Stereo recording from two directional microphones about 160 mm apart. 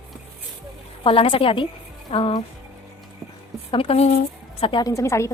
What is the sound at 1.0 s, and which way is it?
A woman's voice, 35° left (ahead or behind).